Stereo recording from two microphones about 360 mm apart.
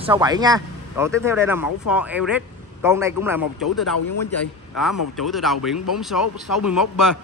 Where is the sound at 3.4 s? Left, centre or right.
Left.